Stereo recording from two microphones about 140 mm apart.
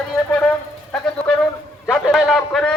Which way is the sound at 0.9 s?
5° left (ahead or behind).